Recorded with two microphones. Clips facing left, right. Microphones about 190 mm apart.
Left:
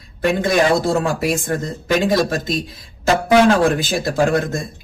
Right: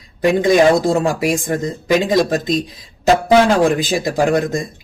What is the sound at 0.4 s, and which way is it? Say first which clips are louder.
Speech: right 4 dB; 15° right (ahead or behind).